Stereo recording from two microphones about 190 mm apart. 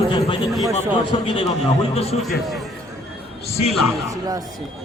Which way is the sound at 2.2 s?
Centre (ahead or behind).